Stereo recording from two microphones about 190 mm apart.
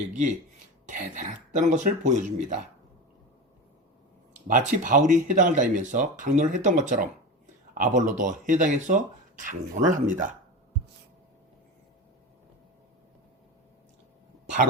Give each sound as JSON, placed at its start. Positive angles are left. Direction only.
{"t": 0.9, "sound": "speech", "side_deg": -40}
{"t": 4.4, "sound": "speech", "side_deg": -45}